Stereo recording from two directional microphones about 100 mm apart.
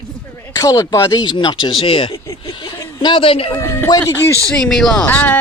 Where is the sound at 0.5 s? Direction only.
35° left (ahead or behind).